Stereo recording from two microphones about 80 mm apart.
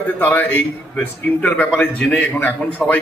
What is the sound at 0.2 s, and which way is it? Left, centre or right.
A man's voice, left.